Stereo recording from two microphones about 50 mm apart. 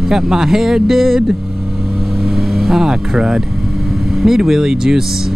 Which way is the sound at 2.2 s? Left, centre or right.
Centre.